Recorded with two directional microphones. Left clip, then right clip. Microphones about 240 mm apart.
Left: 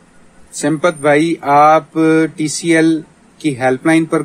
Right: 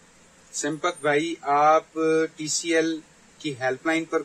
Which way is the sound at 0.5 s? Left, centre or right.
Left.